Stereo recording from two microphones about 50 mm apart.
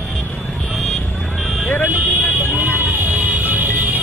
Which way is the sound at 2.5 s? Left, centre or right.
Right.